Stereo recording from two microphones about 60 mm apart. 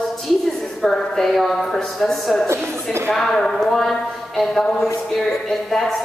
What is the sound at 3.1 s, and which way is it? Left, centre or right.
A child's voice, centre.